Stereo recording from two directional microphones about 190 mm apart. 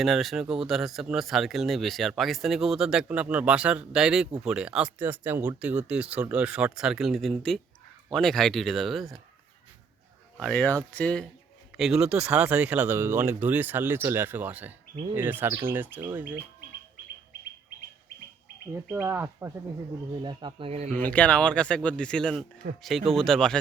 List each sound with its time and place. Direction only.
0.0 s speech: centre (ahead or behind)
10.5 s speech: 5° left (ahead or behind); by 16.4 s 10° right (ahead or behind)
18.7 s speech: 10° right (ahead or behind)
20.2 s speech: 25° right (ahead or behind)
20.9 s speech: 5° left (ahead or behind)